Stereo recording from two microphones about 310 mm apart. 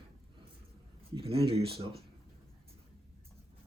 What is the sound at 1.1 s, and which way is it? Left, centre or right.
Speech, centre.